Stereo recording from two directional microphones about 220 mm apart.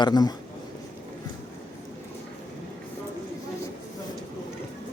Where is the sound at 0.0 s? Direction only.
20° left (ahead or behind).